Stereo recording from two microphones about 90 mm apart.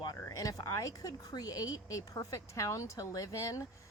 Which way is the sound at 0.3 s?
40° left (ahead or behind).